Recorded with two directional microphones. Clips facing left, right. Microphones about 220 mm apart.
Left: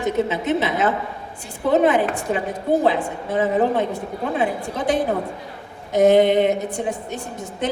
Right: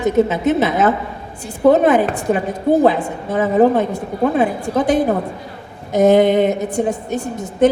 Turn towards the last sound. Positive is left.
turn(degrees=-45)  # may be behind; listen again after turning